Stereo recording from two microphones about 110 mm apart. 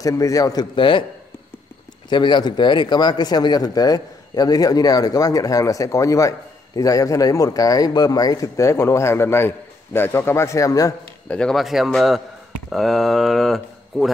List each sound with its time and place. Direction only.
0.0 s speech: 30° left (ahead or behind); by 1.0 s 50° left (ahead or behind)
2.0 s a man's voice: 45° left (ahead or behind)
11.2 s a man's voice: 5° left (ahead or behind)